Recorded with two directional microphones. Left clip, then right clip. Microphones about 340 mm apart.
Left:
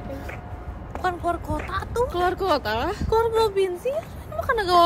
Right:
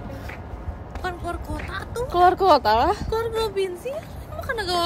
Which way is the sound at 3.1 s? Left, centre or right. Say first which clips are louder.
Left 4 dB; centre.